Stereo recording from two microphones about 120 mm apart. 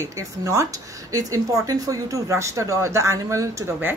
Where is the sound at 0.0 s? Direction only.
25° right (ahead or behind).